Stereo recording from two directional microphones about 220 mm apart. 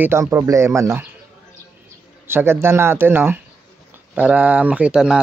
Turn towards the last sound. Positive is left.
turn(degrees=-5)  # may be behind; listen again after turning